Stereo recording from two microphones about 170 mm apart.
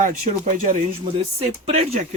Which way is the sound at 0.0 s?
55° right (ahead or behind).